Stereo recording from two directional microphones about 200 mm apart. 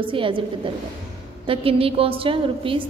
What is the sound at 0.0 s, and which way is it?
Speech, 25° right (ahead or behind).